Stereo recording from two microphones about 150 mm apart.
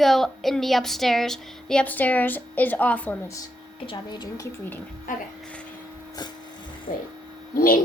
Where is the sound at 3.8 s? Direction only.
30° left (ahead or behind).